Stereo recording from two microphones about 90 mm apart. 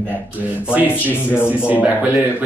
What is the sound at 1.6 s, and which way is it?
Speech, 15° right (ahead or behind).